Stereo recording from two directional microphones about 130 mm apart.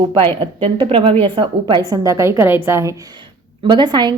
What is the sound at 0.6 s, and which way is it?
A woman's voice, 45° right (ahead or behind).